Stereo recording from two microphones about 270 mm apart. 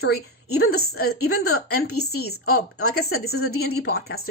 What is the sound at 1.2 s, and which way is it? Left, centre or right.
A woman's voice, left.